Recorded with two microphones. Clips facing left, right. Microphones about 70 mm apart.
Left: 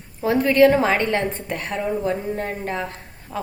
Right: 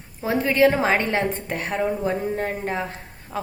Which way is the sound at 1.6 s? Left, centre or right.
Right.